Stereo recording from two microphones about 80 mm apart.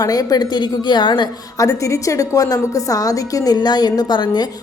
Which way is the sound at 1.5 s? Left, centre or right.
Left.